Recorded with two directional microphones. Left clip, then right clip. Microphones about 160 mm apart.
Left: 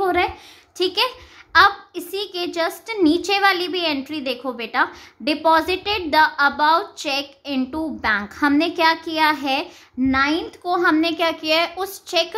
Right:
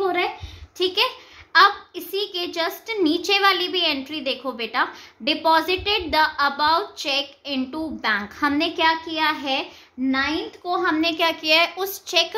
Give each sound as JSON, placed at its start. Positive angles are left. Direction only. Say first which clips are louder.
{"t": 0.0, "sound": "a sound", "louder": "left 3 dB", "side_deg": 50}
{"t": 0.7, "sound": "a child's voice", "louder": "left 1 dB", "side_deg": 30}
{"t": 10.0, "sound": "a child's voice", "louder": "left 4 dB", "side_deg": 55}
{"t": 11.0, "sound": "a child's voice", "louder": "left 1 dB", "side_deg": 30}